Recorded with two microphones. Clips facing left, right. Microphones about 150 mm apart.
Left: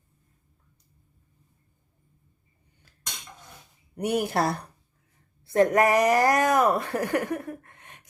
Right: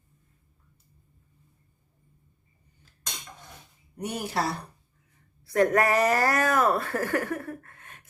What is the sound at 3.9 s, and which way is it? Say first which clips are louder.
Speech: left 5 dB; 60° left (ahead or behind).